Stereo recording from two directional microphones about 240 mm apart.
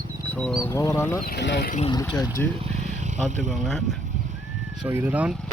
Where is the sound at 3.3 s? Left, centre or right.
Right.